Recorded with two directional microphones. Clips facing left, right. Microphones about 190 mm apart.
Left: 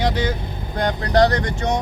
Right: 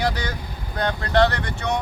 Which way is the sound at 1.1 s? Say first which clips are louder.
Left 3 dB; 40° left (ahead or behind).